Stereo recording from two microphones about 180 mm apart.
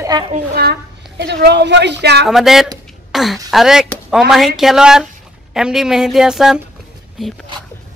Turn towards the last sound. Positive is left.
turn(degrees=0)  # may be behind; listen again after turning